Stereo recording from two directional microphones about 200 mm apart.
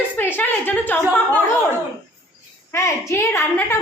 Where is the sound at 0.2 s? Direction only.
10° left (ahead or behind).